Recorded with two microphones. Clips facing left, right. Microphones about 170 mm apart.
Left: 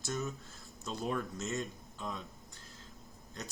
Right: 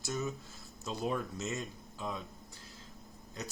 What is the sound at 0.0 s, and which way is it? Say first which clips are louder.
Speech: right 1 dB; centre (ahead or behind).